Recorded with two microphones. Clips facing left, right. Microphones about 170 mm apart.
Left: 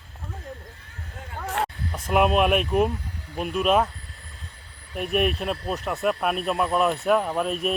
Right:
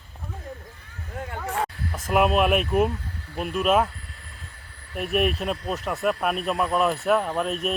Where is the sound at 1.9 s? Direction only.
Centre (ahead or behind).